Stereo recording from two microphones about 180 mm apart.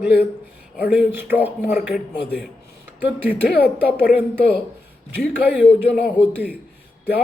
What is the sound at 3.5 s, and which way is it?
Speech, 60° left (ahead or behind).